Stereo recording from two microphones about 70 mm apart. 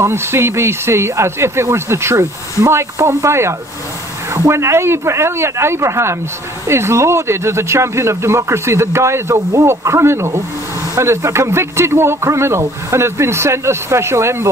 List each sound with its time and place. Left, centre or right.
0.0 s speech: right